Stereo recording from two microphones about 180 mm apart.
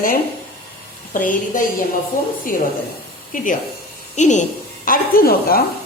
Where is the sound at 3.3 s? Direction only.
50° left (ahead or behind).